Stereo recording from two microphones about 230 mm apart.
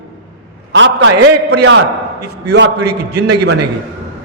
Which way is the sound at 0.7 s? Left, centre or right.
Right.